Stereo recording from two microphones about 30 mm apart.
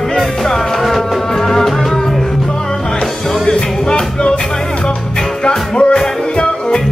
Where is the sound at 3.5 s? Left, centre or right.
Left.